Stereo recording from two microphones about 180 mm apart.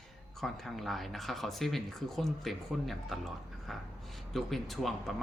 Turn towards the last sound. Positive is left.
turn(degrees=0)  # may be behind; listen again after turning